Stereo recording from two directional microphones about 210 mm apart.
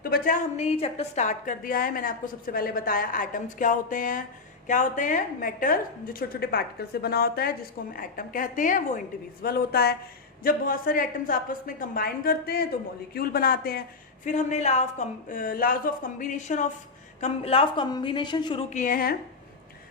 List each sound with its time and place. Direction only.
0.0 s a woman's voice: 40° left (ahead or behind)
14.3 s a woman's voice: 35° left (ahead or behind)
18.7 s a woman's voice: 40° left (ahead or behind)